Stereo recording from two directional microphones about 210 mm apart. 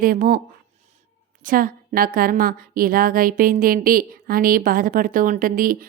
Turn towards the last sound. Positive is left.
turn(degrees=-40)  # may be behind; listen again after turning